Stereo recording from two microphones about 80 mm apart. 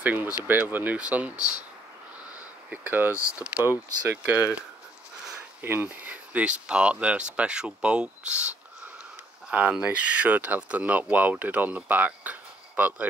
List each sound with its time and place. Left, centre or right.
0.0 s speech: right
2.7 s speech: right
3.4 s speech: right
4.2 s speech: centre
5.6 s speech: right
9.5 s speech: centre